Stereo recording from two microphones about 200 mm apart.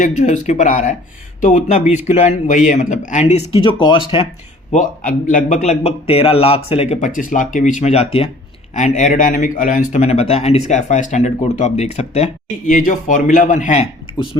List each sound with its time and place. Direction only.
0.0 s speech: 35° left (ahead or behind)
3.5 s speech: 25° left (ahead or behind)
4.7 s speech: 40° left (ahead or behind)